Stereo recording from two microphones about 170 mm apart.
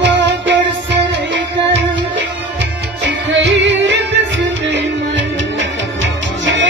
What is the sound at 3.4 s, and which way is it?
Music, 90° right.